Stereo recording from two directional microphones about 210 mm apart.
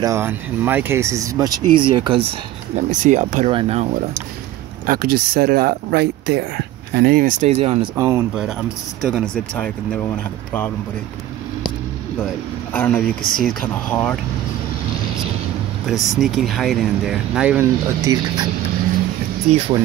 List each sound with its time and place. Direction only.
0.0 s speech: 10° right (ahead or behind)
2.7 s speech: 35° right (ahead or behind)
4.8 s speech: 45° right (ahead or behind); by 7.9 s 30° right (ahead or behind)
7.9 s speech: 10° right (ahead or behind)
12.7 s speech: 5° left (ahead or behind)
15.9 s speech: centre (ahead or behind)
18.0 s speech: 15° right (ahead or behind)